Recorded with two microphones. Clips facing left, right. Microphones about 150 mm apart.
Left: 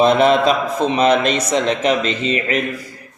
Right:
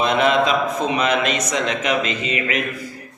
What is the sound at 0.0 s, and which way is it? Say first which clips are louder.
Speech: left 5 dB; 35° left (ahead or behind).